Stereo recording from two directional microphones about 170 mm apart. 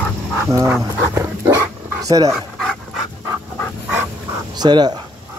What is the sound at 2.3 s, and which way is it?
Dog, centre (ahead or behind).